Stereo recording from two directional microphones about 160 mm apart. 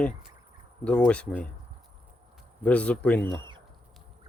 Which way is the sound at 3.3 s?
30° right (ahead or behind).